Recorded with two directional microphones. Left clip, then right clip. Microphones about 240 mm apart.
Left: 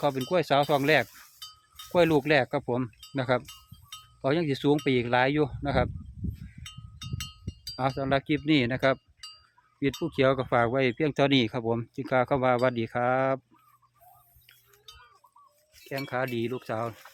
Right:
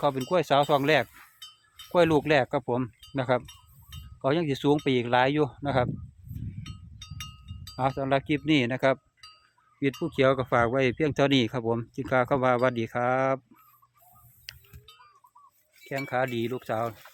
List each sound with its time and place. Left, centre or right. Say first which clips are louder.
0.0 s speech: right 1 dB; centre
6.6 s cowbell: left 2 dB; left
7.8 s speech: right 1 dB; centre
15.8 s speech: right 3 dB; centre